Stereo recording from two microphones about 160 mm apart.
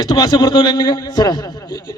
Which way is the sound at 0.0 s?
25° left (ahead or behind).